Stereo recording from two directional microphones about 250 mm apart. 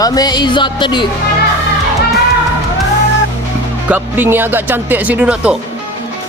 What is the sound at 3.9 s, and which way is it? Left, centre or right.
Speech, centre.